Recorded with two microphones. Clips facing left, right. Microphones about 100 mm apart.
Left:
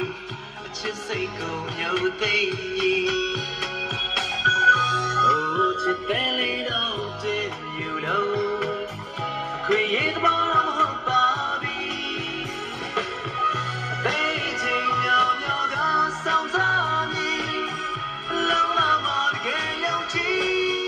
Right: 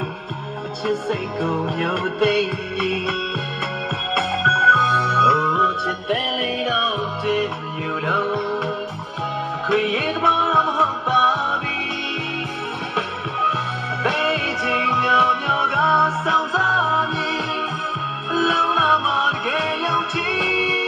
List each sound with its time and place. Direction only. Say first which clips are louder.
0.8 s music: right 6 dB; 40° right (ahead or behind)
6.8 s music: right 6 dB; 50° right (ahead or behind)
8.1 s music: right 1 dB; 35° right (ahead or behind)
12.9 s music: right 2 dB; 40° right (ahead or behind)